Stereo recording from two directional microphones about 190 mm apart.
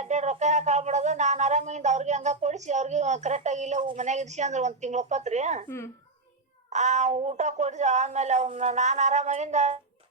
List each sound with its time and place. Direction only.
0.0 s speech: 35° right (ahead or behind)
5.6 s a child's voice: 15° left (ahead or behind)
6.7 s speech: 40° right (ahead or behind)